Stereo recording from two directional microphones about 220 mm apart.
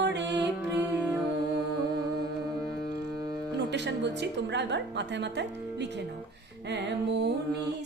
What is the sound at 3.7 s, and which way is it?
Music, 50° right (ahead or behind).